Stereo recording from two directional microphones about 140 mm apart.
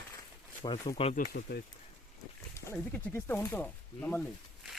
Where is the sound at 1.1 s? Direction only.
80° left.